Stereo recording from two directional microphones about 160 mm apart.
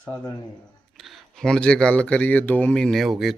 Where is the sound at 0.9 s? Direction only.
Centre (ahead or behind).